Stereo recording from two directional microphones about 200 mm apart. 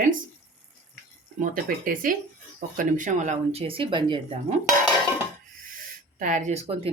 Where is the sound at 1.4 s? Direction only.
45° right (ahead or behind); by 4.5 s 25° right (ahead or behind).